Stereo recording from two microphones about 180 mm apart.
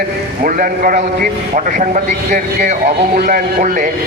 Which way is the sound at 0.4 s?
50° right (ahead or behind).